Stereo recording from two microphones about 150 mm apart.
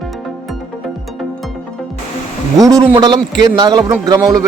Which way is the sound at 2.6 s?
25° right (ahead or behind).